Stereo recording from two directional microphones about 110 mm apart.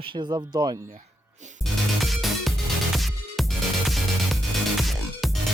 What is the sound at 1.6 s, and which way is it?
Music, centre (ahead or behind).